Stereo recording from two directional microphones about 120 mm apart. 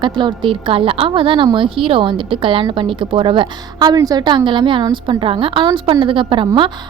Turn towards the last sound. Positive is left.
turn(degrees=-45)  # may be behind; listen again after turning